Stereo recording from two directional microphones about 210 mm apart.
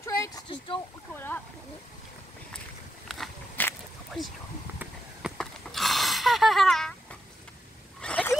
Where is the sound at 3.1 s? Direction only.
5° left (ahead or behind).